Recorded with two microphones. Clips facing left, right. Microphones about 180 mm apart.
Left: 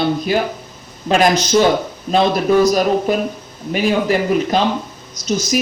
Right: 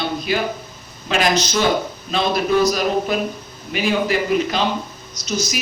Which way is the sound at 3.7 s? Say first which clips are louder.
Left 3 dB; 45° left (ahead or behind).